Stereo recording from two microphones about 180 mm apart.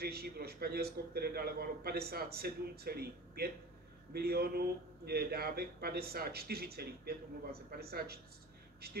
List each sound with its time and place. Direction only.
0.0 s a man's voice: 60° right (ahead or behind)